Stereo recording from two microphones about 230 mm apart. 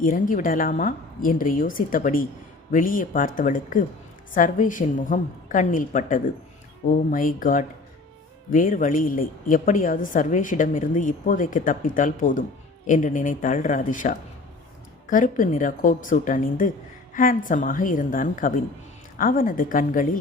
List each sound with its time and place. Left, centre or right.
0.0 s a woman's voice: left